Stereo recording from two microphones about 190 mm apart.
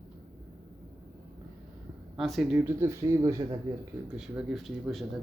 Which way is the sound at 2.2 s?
Centre (ahead or behind).